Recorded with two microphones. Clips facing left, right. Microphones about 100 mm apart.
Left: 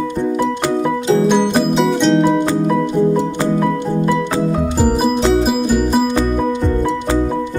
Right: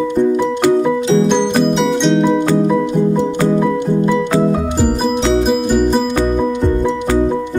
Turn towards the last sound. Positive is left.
turn(degrees=5)  # may be behind; listen again after turning